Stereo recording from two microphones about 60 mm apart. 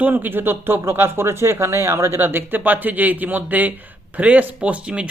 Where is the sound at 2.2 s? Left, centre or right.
Right.